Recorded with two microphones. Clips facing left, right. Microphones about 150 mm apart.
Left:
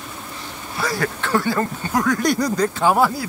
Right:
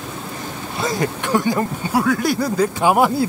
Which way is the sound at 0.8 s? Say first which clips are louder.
Right 2 dB; 20° right (ahead or behind).